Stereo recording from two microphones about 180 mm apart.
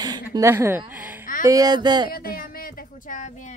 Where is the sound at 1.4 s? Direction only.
20° right (ahead or behind).